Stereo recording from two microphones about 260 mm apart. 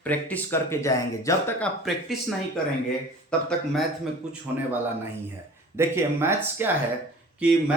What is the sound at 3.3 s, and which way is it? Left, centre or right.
Speech, centre.